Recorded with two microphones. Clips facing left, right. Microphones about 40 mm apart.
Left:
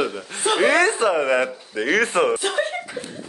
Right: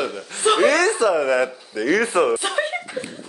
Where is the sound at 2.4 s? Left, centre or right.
Centre.